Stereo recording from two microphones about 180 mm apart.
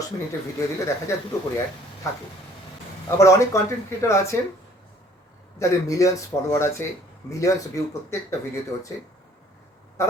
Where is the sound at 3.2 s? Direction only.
15° left (ahead or behind).